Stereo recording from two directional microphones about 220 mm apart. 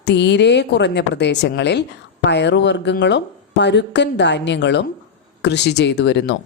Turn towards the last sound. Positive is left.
turn(degrees=50)  # may be behind; listen again after turning